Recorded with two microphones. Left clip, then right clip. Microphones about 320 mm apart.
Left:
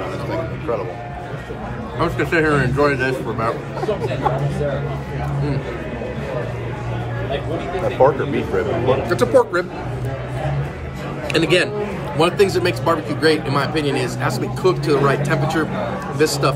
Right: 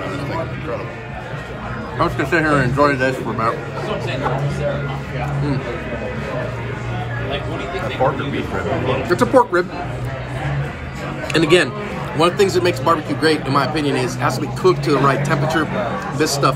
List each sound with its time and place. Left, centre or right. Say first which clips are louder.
2.0 s a man's voice: right 1 dB; centre
9.1 s speech: right 3 dB; centre
11.3 s speech: right 2 dB; centre
12.2 s a man's voice: right 1 dB; centre